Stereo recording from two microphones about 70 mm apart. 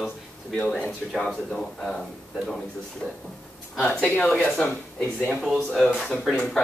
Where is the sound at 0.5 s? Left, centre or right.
Centre.